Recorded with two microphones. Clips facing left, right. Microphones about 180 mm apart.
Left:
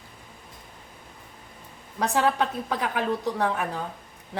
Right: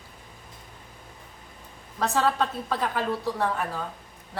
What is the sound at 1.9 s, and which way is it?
A woman's voice, 15° left (ahead or behind).